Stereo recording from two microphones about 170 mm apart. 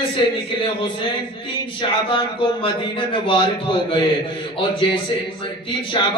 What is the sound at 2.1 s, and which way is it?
Speech, 30° left (ahead or behind).